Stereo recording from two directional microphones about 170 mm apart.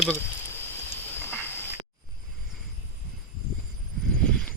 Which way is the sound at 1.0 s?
10° left (ahead or behind).